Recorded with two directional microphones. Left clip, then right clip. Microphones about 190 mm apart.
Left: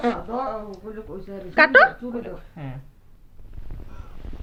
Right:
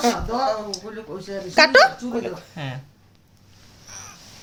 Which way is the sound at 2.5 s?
15° right (ahead or behind).